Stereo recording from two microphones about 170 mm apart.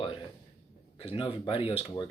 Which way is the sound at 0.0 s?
30° left (ahead or behind).